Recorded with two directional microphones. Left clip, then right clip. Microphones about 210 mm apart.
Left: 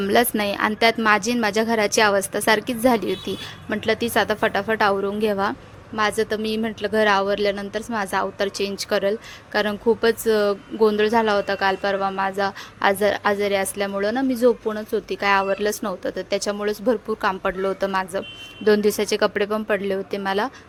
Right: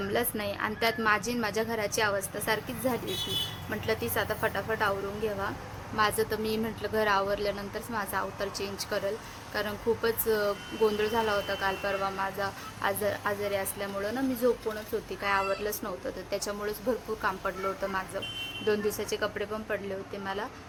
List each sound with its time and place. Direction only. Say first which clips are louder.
0.0 s a woman's voice: left 11 dB; 45° left (ahead or behind)
6.0 s a woman's voice: left 6 dB; 35° left (ahead or behind)